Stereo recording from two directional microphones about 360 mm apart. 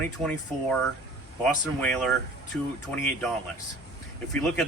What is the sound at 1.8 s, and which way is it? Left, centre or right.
Speech, centre.